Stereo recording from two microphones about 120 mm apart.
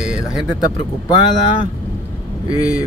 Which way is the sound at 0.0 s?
5° right (ahead or behind).